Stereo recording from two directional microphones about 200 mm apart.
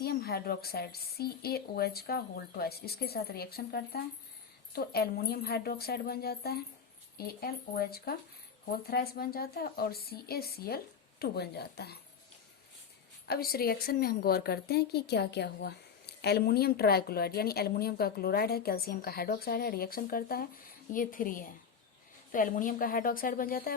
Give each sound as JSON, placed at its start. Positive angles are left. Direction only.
{"t": 0.0, "sound": "a woman's voice", "side_deg": 50}
{"t": 13.2, "sound": "a woman's voice", "side_deg": 50}